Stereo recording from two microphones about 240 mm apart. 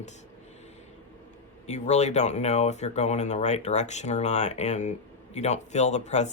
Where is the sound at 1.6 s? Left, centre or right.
Left.